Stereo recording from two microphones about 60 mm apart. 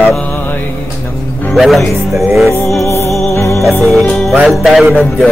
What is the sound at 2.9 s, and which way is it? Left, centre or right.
Music, left.